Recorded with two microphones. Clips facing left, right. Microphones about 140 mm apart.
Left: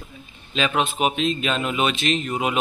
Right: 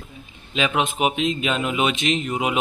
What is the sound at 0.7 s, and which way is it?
Speech, 15° right (ahead or behind).